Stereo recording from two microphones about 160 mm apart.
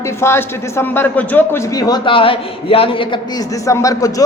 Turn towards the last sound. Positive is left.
turn(degrees=20)  # may be behind; listen again after turning